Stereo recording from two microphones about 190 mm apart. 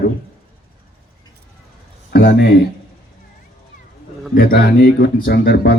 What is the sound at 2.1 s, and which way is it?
Speech, 55° left (ahead or behind).